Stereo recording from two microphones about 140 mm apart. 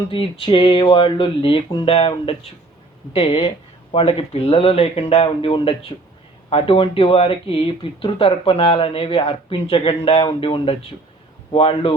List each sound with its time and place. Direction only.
0.1 s speech: 40° left (ahead or behind)